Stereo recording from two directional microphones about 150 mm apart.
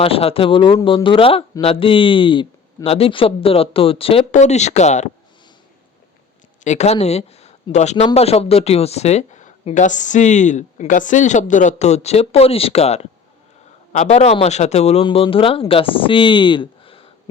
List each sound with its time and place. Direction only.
0.0 s speech: 40° left (ahead or behind)
6.7 s speech: 45° left (ahead or behind)